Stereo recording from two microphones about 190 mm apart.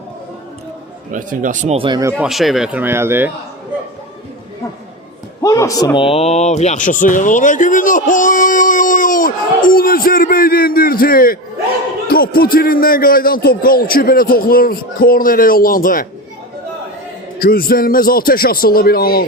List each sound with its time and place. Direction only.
1.1 s speech: 45° right (ahead or behind)
2.1 s speech: centre (ahead or behind)
5.4 s speech: 15° left (ahead or behind); by 16.0 s 45° left (ahead or behind)
17.4 s speech: 50° left (ahead or behind)